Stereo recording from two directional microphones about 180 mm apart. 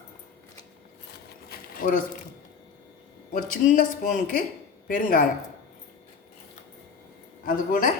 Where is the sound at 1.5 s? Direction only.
50° left (ahead or behind).